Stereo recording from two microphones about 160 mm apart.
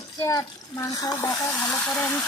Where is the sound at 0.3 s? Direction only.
15° left (ahead or behind).